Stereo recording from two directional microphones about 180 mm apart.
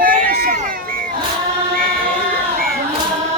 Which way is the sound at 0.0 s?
50° right (ahead or behind).